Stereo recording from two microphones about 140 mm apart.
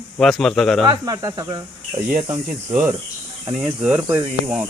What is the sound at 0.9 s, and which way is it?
Speech, 25° right (ahead or behind).